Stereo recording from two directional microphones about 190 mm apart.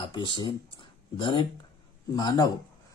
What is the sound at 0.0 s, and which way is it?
Speech, 25° left (ahead or behind).